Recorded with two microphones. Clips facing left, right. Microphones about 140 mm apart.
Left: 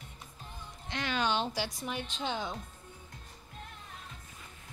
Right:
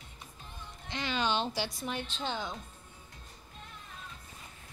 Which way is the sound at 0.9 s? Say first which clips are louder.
Even; 5° left (ahead or behind).